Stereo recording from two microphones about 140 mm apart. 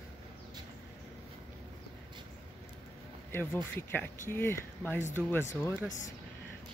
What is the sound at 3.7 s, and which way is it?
Speech, 15° left (ahead or behind).